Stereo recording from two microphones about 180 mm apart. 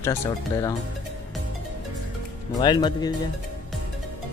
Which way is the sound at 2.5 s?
25° left (ahead or behind).